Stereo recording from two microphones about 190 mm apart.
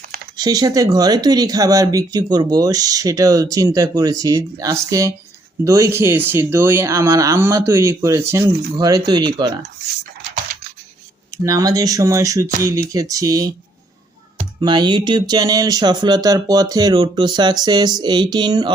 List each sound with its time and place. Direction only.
0.3 s speech: 20° right (ahead or behind)
11.4 s speech: 20° right (ahead or behind)
14.6 s speech: 25° right (ahead or behind)